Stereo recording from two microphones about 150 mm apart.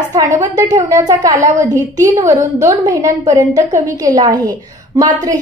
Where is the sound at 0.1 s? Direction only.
25° right (ahead or behind).